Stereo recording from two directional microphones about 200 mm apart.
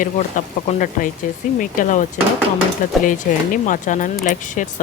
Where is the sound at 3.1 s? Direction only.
40° left (ahead or behind).